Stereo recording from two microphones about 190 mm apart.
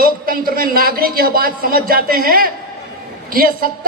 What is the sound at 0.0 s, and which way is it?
A man's voice, 50° right (ahead or behind).